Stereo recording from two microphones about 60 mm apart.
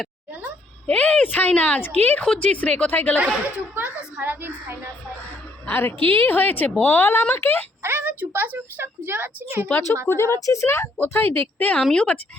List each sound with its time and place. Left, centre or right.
0.9 s a woman's voice: left
3.2 s a woman's voice: right
5.6 s a woman's voice: left
7.8 s a woman's voice: right
10.1 s speech: left
10.4 s a woman's voice: left
10.9 s a woman's voice: left
11.8 s speech: centre